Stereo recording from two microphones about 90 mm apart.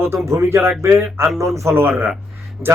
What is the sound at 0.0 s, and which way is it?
Speech, 30° right (ahead or behind).